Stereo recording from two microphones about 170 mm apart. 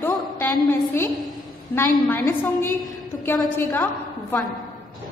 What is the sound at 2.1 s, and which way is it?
A woman's voice, 15° left (ahead or behind).